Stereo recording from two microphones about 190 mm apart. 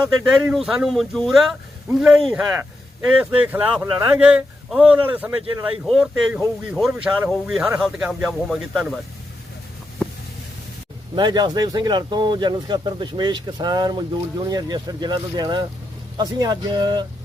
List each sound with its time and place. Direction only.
0.3 s speech: 5° right (ahead or behind)
11.1 s speech: 20° right (ahead or behind)